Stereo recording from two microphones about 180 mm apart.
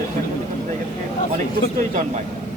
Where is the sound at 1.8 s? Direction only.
40° right (ahead or behind).